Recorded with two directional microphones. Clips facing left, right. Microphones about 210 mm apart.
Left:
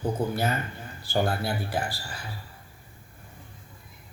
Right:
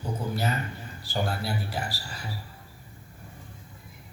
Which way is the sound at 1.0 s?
50° left (ahead or behind).